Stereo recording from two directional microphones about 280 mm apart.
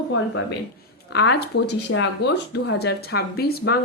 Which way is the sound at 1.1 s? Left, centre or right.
Left.